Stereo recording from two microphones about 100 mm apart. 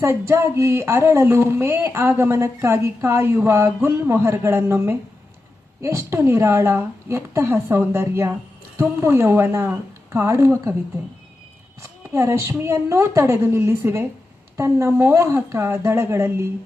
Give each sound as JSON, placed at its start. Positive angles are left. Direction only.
{"t": 0.0, "sound": "speech", "side_deg": -25}
{"t": 11.8, "sound": "speech", "side_deg": -25}